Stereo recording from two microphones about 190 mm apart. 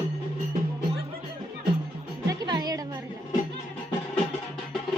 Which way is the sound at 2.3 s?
20° right (ahead or behind).